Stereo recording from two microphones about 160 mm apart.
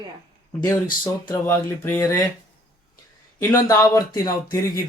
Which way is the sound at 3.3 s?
20° left (ahead or behind).